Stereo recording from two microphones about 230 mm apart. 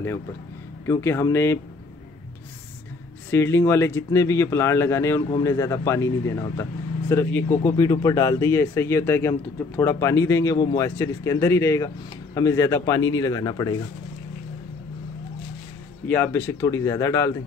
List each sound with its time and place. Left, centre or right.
0.8 s speech: centre
3.3 s speech: centre
16.1 s speech: centre